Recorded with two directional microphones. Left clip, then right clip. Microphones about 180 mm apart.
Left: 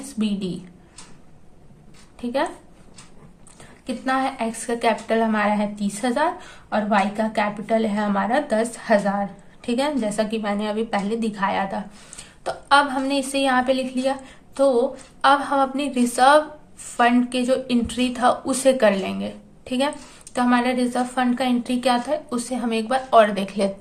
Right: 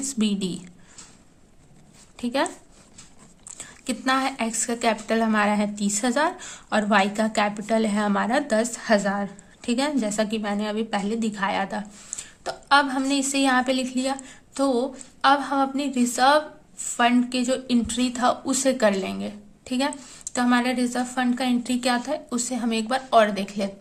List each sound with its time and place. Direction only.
0.1 s a woman's voice: 35° right (ahead or behind)
2.2 s a woman's voice: 35° right (ahead or behind)
3.8 s a woman's voice: 35° right (ahead or behind); by 23.7 s 10° right (ahead or behind)